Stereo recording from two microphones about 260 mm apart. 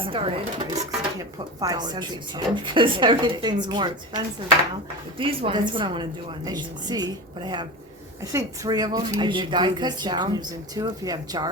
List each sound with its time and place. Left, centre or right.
0.0 s speech: right